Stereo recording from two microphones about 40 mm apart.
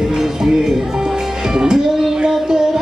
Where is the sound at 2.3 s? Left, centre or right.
Centre.